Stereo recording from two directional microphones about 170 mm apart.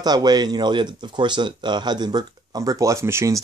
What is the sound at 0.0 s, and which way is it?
Speech, 25° right (ahead or behind).